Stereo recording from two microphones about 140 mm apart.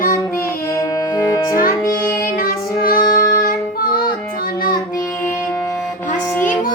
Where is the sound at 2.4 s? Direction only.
90° left.